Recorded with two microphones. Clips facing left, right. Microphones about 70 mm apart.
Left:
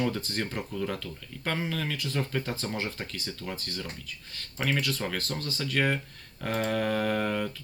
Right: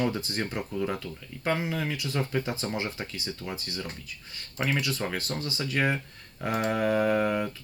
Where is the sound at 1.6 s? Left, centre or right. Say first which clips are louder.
Right 1 dB; centre.